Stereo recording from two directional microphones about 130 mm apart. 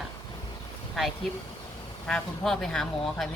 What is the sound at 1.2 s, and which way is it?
Speech, centre (ahead or behind).